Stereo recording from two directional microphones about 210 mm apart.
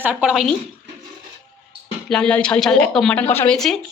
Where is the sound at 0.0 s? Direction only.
5° right (ahead or behind).